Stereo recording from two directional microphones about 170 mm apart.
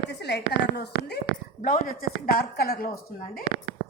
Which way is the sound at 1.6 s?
50° left (ahead or behind).